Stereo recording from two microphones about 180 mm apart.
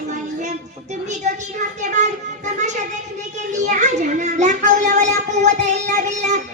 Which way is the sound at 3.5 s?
40° right (ahead or behind).